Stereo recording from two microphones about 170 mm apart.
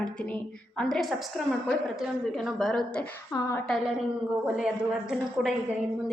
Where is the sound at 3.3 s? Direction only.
15° left (ahead or behind).